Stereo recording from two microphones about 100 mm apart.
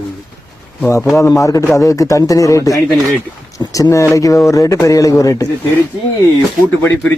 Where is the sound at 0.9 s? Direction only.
30° left (ahead or behind).